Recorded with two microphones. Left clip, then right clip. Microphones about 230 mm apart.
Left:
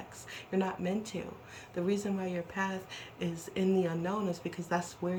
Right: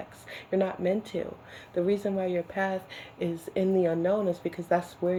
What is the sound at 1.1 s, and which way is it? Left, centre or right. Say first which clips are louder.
Speech: right 8 dB; right.